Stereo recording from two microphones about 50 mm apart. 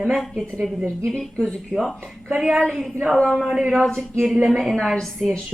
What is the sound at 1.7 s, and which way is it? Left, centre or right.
Speech, right.